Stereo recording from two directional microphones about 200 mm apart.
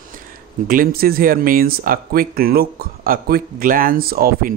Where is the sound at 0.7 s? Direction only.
45° right (ahead or behind).